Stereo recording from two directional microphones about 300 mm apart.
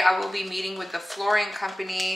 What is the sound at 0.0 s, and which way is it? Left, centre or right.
A woman's voice, centre.